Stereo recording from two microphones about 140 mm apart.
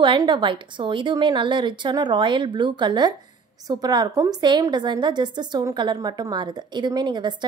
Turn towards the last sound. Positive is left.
turn(degrees=-30)  # may be behind; listen again after turning